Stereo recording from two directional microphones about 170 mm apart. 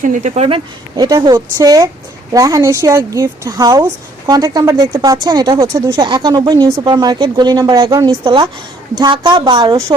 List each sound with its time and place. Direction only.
0.0 s speech: 45° right (ahead or behind); by 9.8 s 25° right (ahead or behind)